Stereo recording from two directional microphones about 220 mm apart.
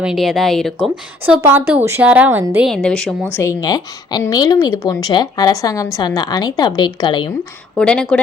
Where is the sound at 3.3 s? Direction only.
15° left (ahead or behind).